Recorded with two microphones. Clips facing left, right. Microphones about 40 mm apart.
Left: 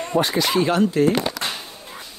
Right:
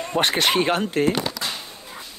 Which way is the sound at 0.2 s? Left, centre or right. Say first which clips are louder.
Right 1 dB; right.